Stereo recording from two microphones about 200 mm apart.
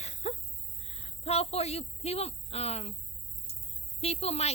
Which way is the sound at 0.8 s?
30° left (ahead or behind).